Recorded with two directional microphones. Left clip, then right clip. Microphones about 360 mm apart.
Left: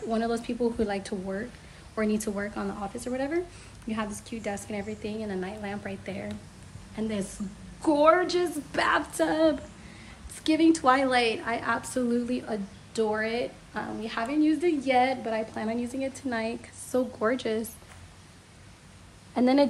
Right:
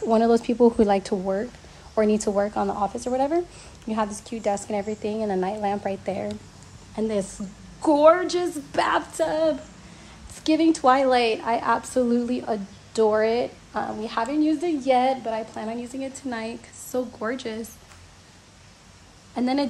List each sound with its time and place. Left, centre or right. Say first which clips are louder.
0.1 s a woman's voice: right 10 dB; centre
19.3 s a woman's voice: left 2 dB; centre